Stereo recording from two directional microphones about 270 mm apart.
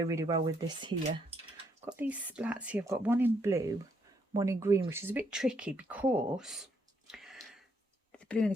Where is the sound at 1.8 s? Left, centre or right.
Centre.